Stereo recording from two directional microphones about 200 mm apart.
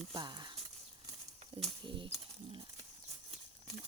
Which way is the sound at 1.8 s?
25° right (ahead or behind).